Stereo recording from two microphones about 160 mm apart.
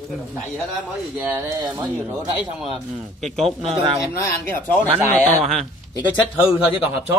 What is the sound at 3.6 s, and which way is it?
Speech, 35° right (ahead or behind).